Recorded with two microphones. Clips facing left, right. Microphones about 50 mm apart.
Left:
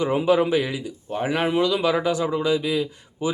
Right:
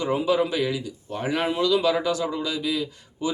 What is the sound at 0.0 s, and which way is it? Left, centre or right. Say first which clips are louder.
Speech: left 3 dB; left.